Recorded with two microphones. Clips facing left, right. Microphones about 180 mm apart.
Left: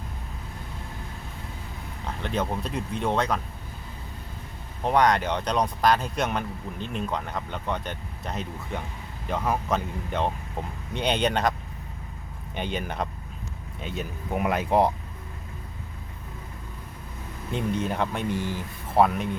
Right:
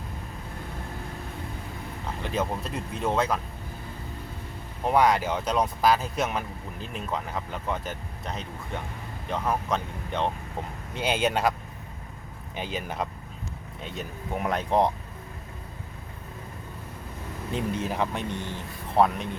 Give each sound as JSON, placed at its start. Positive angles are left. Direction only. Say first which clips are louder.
{"t": 2.2, "sound": "speech", "louder": "left 1 dB", "side_deg": -5}
{"t": 4.8, "sound": "speech", "louder": "even", "side_deg": -5}
{"t": 12.5, "sound": "speech", "louder": "left 2 dB", "side_deg": 0}
{"t": 17.5, "sound": "speech", "louder": "left 2 dB", "side_deg": 0}